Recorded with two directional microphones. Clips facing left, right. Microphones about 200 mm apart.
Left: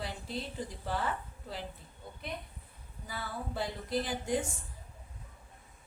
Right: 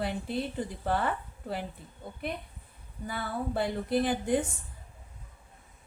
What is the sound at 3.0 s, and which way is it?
A woman's voice, 60° right (ahead or behind).